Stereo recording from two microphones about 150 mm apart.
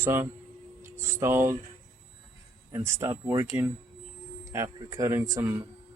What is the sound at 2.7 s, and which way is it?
Speech, 20° right (ahead or behind).